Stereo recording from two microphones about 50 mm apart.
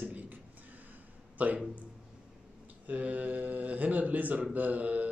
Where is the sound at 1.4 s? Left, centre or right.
Right.